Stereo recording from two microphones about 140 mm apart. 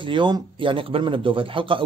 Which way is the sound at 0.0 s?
35° right (ahead or behind).